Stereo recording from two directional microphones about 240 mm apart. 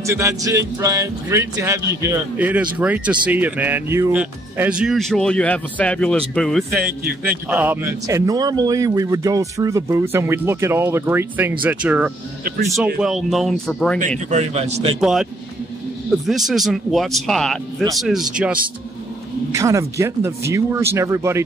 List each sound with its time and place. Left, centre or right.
0.0 s speech: centre
14.3 s a man's voice: right
15.0 s speech: centre
16.3 s speech: centre